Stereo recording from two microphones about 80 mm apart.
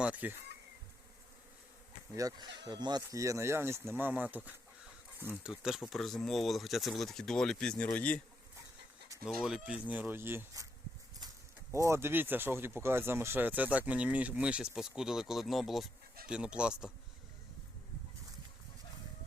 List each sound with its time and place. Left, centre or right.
0.0 s speech: centre
2.1 s speech: right
3.1 s speech: right
5.4 s speech: centre
9.2 s speech: centre
9.9 s speech: right
11.7 s speech: right; by 15.9 s centre
16.3 s speech: centre